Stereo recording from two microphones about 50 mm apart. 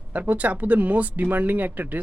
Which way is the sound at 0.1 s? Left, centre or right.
Right.